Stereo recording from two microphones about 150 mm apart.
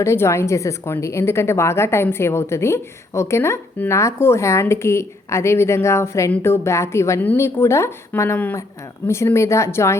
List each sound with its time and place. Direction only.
0.0 s a woman's voice: 20° left (ahead or behind)